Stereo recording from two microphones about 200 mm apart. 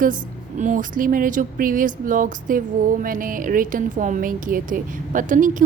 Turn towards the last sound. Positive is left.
turn(degrees=-40)  # may be behind; listen again after turning